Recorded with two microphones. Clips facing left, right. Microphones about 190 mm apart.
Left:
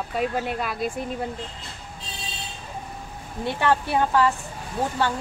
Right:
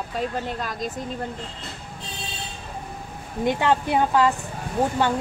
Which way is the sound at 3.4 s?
15° right (ahead or behind).